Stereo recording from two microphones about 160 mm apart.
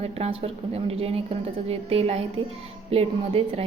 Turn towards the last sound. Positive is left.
turn(degrees=-35)  # may be behind; listen again after turning